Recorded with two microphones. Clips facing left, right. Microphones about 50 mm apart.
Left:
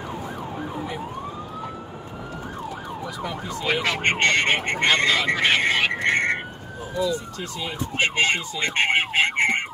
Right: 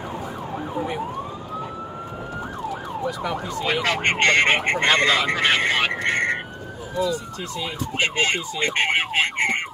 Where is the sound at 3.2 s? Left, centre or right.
Right.